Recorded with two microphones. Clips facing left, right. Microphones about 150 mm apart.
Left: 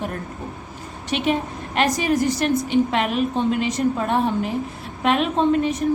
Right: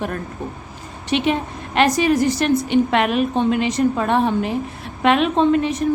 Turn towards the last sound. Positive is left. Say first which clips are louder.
# right 2 dB
turn(degrees=-90)